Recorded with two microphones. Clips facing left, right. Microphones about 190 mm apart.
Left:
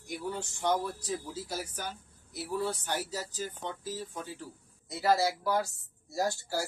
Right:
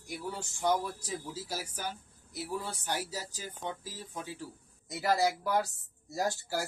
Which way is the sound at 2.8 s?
10° right (ahead or behind).